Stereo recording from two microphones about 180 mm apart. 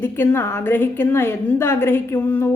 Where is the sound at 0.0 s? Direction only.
10° left (ahead or behind).